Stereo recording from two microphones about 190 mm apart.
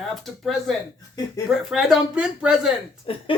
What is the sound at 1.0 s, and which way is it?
Laughter, 20° left (ahead or behind).